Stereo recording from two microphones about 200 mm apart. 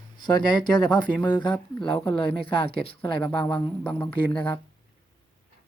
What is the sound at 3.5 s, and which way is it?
Speech, 10° left (ahead or behind).